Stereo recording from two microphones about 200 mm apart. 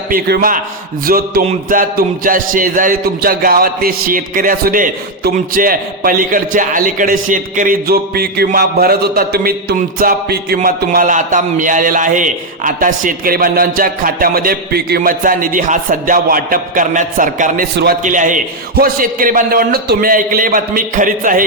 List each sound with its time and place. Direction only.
0.1 s a man's voice: 45° right (ahead or behind)